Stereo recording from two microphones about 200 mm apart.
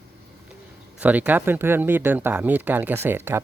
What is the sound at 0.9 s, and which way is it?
Speech, 10° right (ahead or behind).